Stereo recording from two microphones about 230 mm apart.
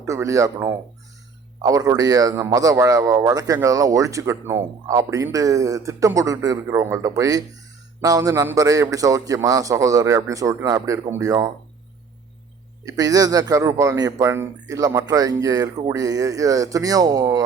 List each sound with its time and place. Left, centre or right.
0.0 s a man's voice: centre
12.8 s a man's voice: centre